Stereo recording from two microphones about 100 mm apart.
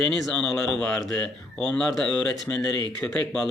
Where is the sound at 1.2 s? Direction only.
10° left (ahead or behind).